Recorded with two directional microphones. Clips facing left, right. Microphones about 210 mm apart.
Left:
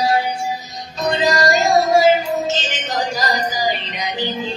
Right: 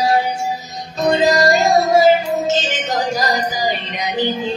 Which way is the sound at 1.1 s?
50° right (ahead or behind).